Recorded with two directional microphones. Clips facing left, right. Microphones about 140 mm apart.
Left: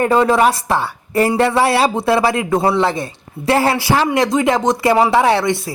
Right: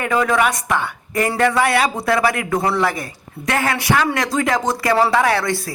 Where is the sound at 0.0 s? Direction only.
30° left (ahead or behind).